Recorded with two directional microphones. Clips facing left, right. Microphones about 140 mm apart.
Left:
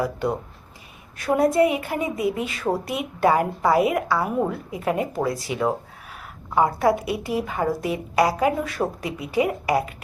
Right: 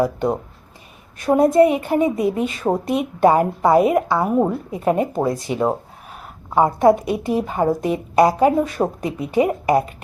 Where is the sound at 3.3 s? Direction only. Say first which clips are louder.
Right 2 dB; 25° right (ahead or behind).